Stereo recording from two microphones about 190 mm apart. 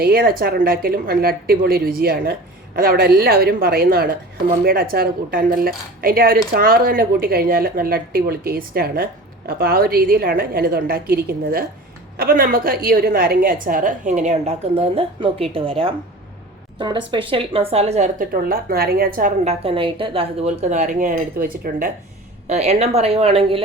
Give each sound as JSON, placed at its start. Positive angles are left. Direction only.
{"t": 0.0, "sound": "a woman's voice", "side_deg": -50}
{"t": 19.5, "sound": "speech", "side_deg": -30}
{"t": 22.4, "sound": "speech", "side_deg": -35}